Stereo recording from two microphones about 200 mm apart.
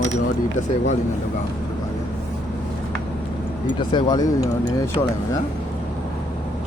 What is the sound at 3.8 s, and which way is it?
Speech, 20° left (ahead or behind).